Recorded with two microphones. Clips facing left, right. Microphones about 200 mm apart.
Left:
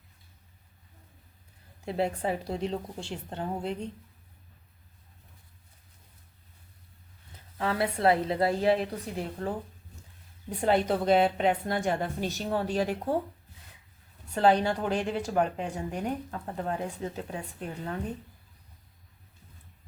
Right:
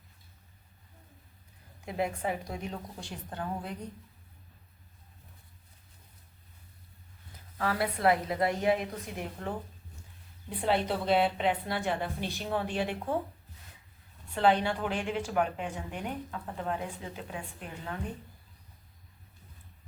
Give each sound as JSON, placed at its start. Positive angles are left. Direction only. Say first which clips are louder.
{"t": 1.8, "sound": "a woman's voice", "louder": "left 3 dB", "side_deg": 30}
{"t": 7.6, "sound": "a woman's voice", "louder": "left 2 dB", "side_deg": 25}
{"t": 10.5, "sound": "a woman's voice", "louder": "left 4 dB", "side_deg": 45}
{"t": 14.3, "sound": "a woman's voice", "louder": "left 3 dB", "side_deg": 40}